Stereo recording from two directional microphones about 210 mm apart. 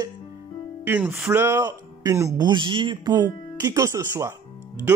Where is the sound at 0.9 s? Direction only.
5° right (ahead or behind).